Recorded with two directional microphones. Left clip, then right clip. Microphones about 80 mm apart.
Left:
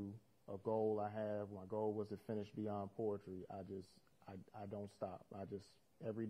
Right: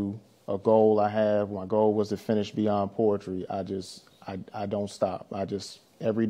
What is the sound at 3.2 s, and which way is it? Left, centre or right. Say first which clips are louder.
Speech: right 19 dB; left.